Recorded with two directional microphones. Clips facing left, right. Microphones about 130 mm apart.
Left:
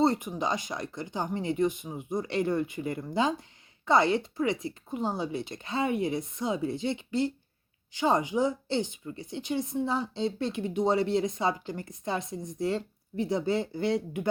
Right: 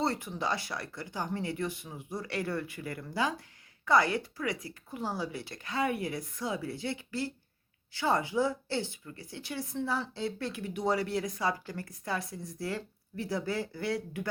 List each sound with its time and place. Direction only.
0.0 s a woman's voice: 20° left (ahead or behind)